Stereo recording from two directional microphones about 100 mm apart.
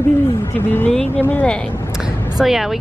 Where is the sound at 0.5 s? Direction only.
20° left (ahead or behind).